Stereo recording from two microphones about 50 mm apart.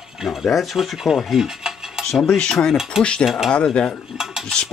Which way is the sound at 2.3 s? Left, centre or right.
Centre.